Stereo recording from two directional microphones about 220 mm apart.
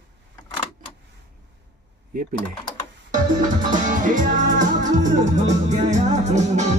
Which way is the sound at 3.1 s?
35° right (ahead or behind).